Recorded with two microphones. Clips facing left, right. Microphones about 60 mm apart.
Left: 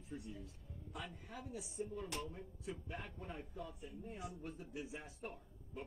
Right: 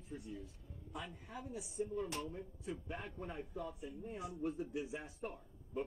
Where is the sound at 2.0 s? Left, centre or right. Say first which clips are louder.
Right 4 dB; centre.